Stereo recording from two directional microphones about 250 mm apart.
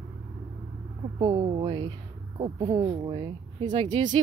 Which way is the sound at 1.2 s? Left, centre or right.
Centre.